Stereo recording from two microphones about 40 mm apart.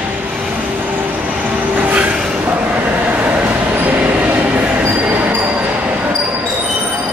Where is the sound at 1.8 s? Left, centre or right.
Right.